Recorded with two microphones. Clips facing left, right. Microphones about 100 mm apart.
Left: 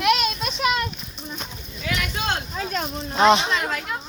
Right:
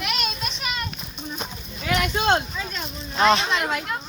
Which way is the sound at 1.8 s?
35° right (ahead or behind).